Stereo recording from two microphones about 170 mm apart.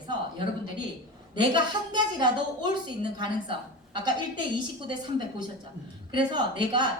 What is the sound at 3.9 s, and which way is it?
Speech, 25° right (ahead or behind).